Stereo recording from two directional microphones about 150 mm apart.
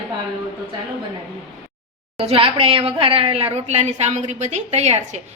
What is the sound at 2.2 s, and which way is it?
A woman's voice, 40° right (ahead or behind).